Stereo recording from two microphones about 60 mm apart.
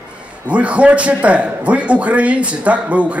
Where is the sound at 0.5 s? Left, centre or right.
Right.